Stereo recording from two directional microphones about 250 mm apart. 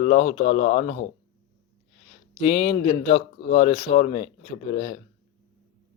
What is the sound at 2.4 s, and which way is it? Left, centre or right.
A man's voice, left.